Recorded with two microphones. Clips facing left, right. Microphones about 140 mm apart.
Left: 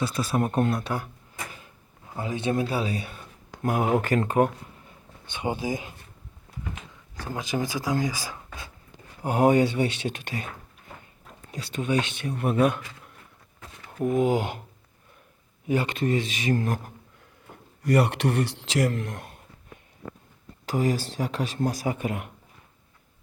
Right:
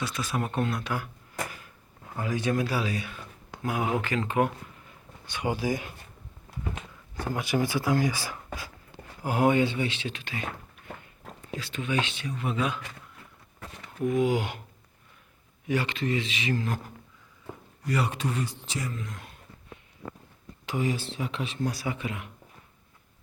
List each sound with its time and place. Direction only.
0.3 s speech: 40° left (ahead or behind)
2.1 s speech: 25° left (ahead or behind)
3.6 s speech: 45° left (ahead or behind)
5.3 s speech: 25° left (ahead or behind)
7.3 s speech: 20° left (ahead or behind)
9.2 s speech: 35° left (ahead or behind)
11.8 s speech: 45° left (ahead or behind)
14.0 s speech: 45° left (ahead or behind)
15.6 s speech: 40° left (ahead or behind)
17.8 s speech: 60° left (ahead or behind)
20.7 s speech: 40° left (ahead or behind)